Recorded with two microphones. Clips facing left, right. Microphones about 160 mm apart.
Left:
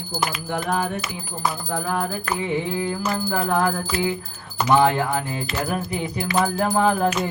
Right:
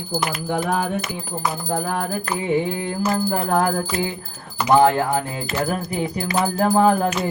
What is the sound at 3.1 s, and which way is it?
Music, 35° right (ahead or behind).